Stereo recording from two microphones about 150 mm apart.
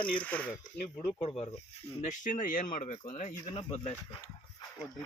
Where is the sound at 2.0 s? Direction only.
60° left (ahead or behind).